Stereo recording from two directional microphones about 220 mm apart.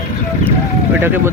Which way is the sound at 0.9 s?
10° right (ahead or behind).